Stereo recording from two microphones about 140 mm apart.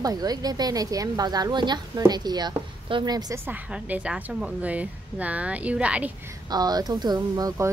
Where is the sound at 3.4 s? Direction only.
10° right (ahead or behind).